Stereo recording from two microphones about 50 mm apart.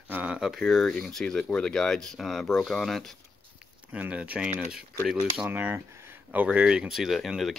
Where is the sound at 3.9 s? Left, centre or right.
Right.